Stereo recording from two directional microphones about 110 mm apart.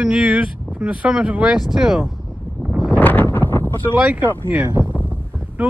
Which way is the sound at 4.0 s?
10° right (ahead or behind).